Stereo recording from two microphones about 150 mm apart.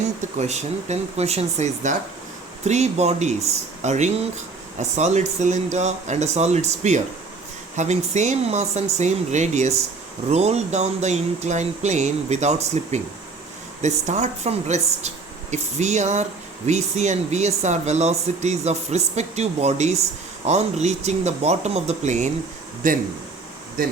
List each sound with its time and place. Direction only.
0.3 s speech: 50° right (ahead or behind)
23.8 s speech: 75° right (ahead or behind)